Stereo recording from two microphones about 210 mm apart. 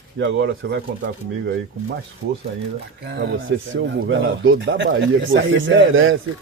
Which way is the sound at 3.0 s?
50° right (ahead or behind).